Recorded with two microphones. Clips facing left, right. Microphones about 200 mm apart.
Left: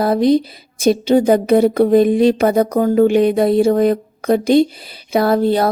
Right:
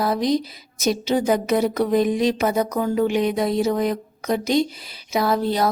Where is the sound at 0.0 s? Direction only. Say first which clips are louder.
Left 7 dB; 55° left (ahead or behind).